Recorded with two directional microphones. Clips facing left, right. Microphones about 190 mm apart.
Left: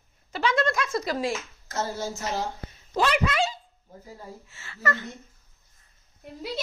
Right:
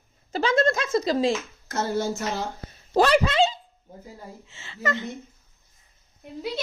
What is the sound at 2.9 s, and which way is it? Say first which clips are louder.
Speech: right 5 dB; 35° right (ahead or behind).